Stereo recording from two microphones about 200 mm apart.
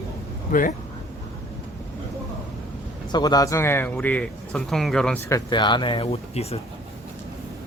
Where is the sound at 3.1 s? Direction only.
20° left (ahead or behind); by 5.1 s 5° left (ahead or behind).